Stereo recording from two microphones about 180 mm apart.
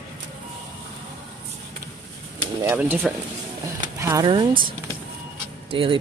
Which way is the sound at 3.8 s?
20° right (ahead or behind).